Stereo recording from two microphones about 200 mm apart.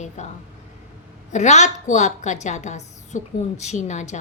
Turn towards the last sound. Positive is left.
turn(degrees=35)  # may be behind; listen again after turning